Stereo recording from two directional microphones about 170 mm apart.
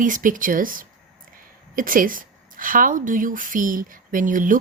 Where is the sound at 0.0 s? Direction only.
50° right (ahead or behind).